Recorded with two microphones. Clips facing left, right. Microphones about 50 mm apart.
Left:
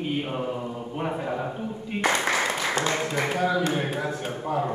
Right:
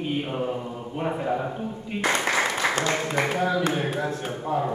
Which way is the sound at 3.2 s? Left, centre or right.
Right.